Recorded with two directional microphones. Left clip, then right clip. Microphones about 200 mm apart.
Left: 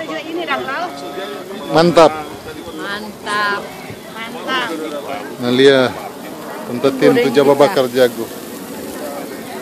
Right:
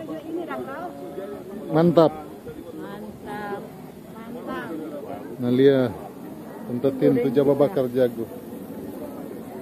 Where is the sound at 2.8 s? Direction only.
45° left (ahead or behind).